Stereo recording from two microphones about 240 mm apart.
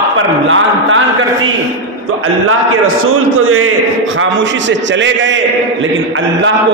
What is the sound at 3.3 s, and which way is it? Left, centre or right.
A man's voice, right.